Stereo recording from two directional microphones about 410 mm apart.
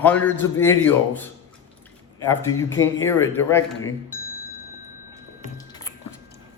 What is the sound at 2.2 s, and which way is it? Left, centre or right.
A man's voice, centre.